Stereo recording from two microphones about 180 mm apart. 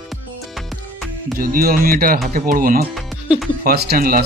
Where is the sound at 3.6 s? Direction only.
60° right (ahead or behind).